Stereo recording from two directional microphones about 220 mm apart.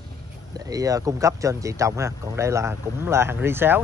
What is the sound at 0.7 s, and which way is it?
Speech, 15° right (ahead or behind).